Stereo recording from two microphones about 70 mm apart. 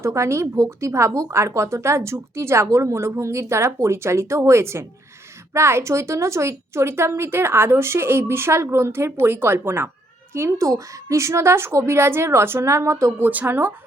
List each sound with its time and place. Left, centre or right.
0.0 s a woman's voice: right
13.1 s speech: right